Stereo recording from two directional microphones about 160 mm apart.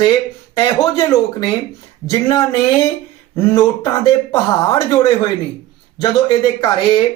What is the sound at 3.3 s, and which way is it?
Speech, 20° left (ahead or behind).